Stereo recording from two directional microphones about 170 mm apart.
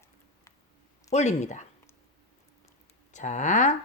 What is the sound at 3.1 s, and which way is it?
Speech, 45° left (ahead or behind).